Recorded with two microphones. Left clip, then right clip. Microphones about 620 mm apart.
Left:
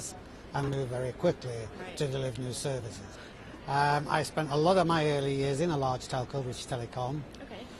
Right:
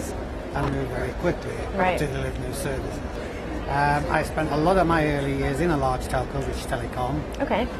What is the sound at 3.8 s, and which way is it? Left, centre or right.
A man's voice, left.